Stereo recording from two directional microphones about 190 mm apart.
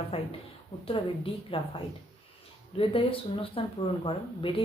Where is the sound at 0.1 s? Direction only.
30° left (ahead or behind).